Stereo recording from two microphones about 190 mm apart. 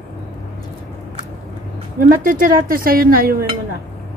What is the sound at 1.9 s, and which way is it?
A woman's voice, 45° right (ahead or behind).